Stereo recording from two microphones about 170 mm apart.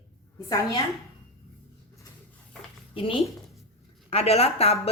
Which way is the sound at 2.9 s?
30° left (ahead or behind).